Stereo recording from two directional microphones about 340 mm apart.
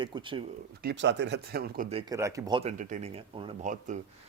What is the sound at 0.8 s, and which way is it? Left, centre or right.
Speech, right.